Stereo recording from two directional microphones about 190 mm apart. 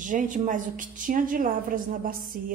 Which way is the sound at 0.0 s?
45° right (ahead or behind).